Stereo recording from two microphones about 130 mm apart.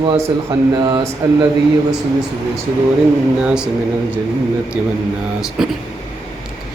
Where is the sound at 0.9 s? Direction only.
30° right (ahead or behind).